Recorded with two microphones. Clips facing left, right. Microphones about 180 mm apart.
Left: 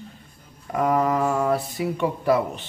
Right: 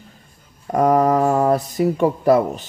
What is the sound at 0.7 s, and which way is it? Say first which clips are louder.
Mantra: right 6 dB; 40° right (ahead or behind).